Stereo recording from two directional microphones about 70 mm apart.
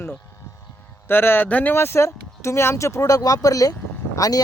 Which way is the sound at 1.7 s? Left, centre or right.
Left.